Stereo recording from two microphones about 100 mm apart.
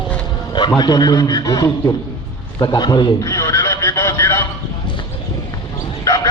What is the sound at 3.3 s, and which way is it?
Neigh, 30° left (ahead or behind).